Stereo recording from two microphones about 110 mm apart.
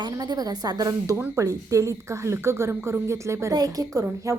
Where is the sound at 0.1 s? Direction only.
35° right (ahead or behind).